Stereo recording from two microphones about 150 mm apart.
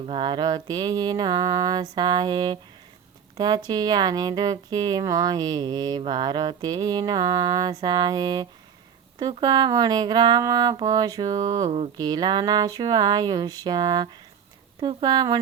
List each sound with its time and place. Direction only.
0.0 s mantra: 35° right (ahead or behind)
3.3 s a woman's voice: 25° right (ahead or behind)
3.7 s mantra: 25° right (ahead or behind)